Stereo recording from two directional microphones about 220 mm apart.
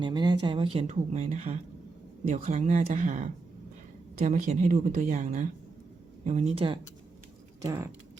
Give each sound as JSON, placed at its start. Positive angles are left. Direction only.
{"t": 0.0, "sound": "speech", "side_deg": -20}
{"t": 7.6, "sound": "speech", "side_deg": -15}